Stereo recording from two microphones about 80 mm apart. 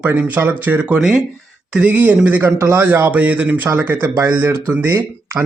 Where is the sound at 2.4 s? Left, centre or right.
Right.